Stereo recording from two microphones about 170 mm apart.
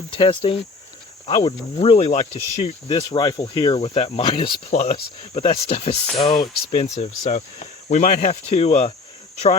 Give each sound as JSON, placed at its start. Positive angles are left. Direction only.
{"t": 0.1, "sound": "speech", "side_deg": 30}
{"t": 4.7, "sound": "speech", "side_deg": 40}